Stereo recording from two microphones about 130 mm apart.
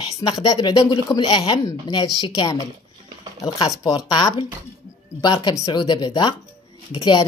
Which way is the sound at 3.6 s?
30° left (ahead or behind).